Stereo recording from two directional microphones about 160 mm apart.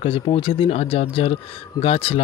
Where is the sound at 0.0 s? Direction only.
35° left (ahead or behind).